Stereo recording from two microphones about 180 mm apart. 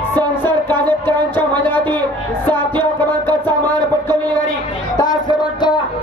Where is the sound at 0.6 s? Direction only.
10° left (ahead or behind).